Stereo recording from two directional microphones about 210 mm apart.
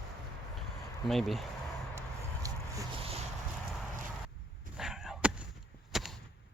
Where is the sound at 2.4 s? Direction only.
15° right (ahead or behind).